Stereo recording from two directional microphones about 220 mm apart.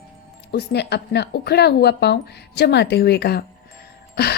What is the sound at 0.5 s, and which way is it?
A woman's voice, 50° left (ahead or behind).